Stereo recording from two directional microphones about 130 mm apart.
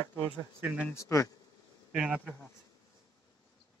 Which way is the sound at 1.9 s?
5° right (ahead or behind).